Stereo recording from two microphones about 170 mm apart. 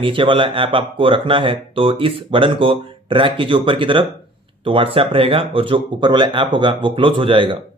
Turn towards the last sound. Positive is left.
turn(degrees=-30)  # may be behind; listen again after turning